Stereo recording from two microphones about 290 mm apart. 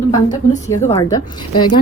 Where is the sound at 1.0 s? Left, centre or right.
Centre.